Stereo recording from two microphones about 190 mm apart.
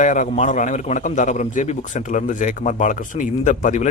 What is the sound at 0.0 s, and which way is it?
A man's voice, 40° left (ahead or behind).